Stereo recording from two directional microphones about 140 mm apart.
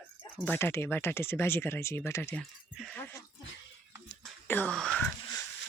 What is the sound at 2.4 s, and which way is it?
Speech, centre (ahead or behind).